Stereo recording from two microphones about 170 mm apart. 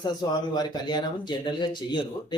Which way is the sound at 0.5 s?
25° left (ahead or behind).